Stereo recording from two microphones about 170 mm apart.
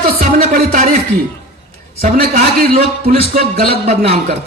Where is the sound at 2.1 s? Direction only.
65° right (ahead or behind).